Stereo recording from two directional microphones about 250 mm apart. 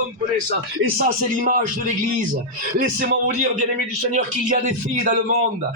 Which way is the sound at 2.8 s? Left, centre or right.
Right.